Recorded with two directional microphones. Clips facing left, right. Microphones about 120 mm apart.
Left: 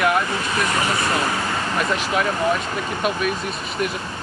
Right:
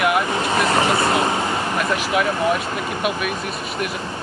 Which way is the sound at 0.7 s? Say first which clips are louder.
Right 4 dB; 35° right (ahead or behind).